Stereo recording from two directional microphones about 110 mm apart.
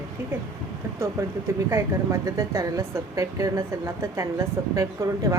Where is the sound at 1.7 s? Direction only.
25° right (ahead or behind).